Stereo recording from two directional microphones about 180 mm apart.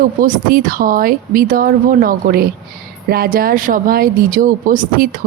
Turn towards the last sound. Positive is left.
turn(degrees=-50)  # may be behind; listen again after turning